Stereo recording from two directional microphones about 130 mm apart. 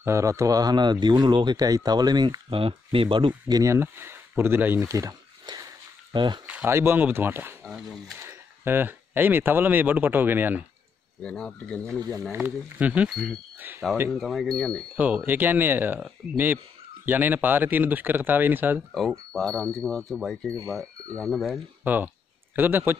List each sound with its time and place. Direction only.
0.0 s speech: 25° right (ahead or behind)
6.1 s speech: 35° right (ahead or behind)
6.4 s speech: 15° right (ahead or behind)
7.6 s speech: centre (ahead or behind)
8.2 s speech: 20° right (ahead or behind)
11.2 s speech: 5° left (ahead or behind)
12.4 s speech: 15° right (ahead or behind)
13.1 s speech: centre (ahead or behind)
13.6 s speech: 15° right (ahead or behind)
14.1 s speech: centre (ahead or behind)
15.0 s speech: 10° right (ahead or behind)
17.0 s speech: 15° right (ahead or behind)
18.9 s speech: centre (ahead or behind)
21.8 s speech: 15° right (ahead or behind)